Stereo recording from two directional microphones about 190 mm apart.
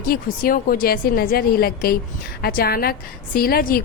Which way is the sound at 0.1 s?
50° left (ahead or behind).